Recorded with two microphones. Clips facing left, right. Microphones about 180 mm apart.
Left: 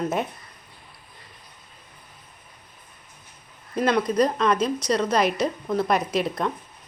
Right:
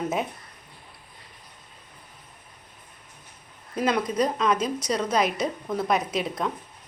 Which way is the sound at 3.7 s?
5° right (ahead or behind).